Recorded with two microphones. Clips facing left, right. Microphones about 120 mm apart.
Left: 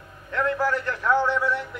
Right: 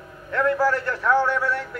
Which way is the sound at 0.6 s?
20° left (ahead or behind).